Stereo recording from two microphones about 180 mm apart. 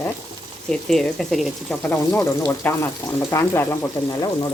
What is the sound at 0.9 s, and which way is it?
Speech, centre (ahead or behind).